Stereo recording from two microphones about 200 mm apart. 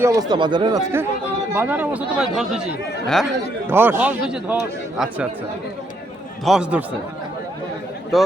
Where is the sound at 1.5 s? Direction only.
10° right (ahead or behind).